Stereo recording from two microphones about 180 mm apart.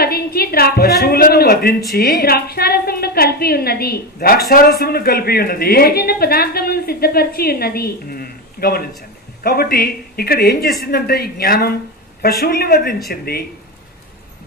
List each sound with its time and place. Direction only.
0.0 s a woman's voice: 60° left (ahead or behind)